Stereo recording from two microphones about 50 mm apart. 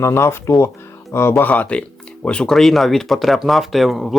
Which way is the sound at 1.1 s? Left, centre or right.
Left.